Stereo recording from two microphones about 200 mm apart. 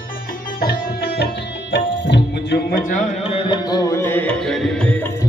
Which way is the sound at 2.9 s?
40° left (ahead or behind).